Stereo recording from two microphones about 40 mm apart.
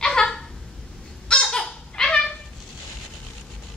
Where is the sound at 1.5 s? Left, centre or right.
Centre.